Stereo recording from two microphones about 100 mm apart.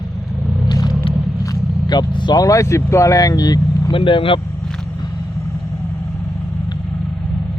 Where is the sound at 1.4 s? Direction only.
40° left (ahead or behind).